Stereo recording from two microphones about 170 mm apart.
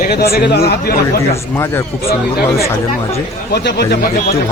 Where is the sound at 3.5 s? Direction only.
75° left (ahead or behind).